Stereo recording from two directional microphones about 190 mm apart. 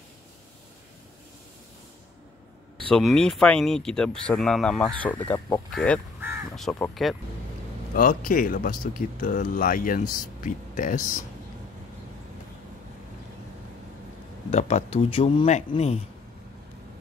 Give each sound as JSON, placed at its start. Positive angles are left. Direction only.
{"t": 2.9, "sound": "speech", "side_deg": 0}
{"t": 7.9, "sound": "speech", "side_deg": 45}
{"t": 14.5, "sound": "speech", "side_deg": 35}